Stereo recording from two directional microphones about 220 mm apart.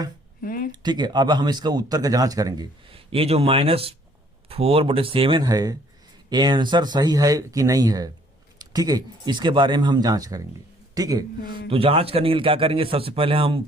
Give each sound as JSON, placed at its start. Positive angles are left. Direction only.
{"t": 0.4, "sound": "speech", "side_deg": 40}
{"t": 0.7, "sound": "speech", "side_deg": -20}